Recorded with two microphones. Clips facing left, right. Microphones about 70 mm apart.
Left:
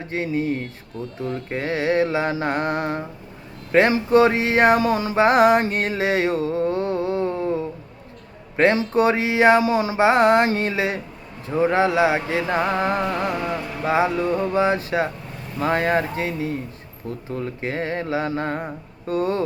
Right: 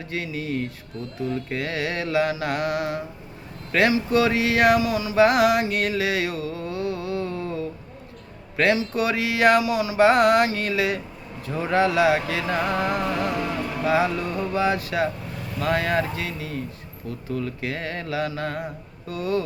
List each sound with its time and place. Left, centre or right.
0.1 s speech: left
1.5 s music: left